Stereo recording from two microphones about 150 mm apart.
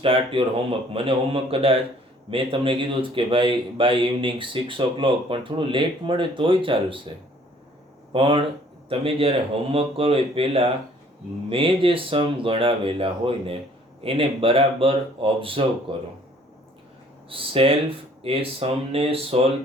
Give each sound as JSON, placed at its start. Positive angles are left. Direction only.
{"t": 0.0, "sound": "speech", "side_deg": -35}
{"t": 8.1, "sound": "speech", "side_deg": -35}
{"t": 17.2, "sound": "speech", "side_deg": -35}